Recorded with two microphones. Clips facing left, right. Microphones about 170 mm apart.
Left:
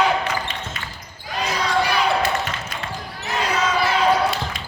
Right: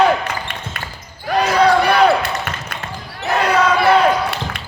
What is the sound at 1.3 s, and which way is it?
Basketball bounce, 65° right (ahead or behind).